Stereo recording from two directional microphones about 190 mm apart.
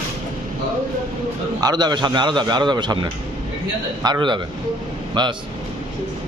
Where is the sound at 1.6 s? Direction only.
20° right (ahead or behind).